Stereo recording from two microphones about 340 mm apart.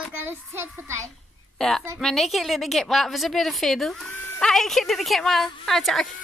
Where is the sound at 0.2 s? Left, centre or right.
Centre.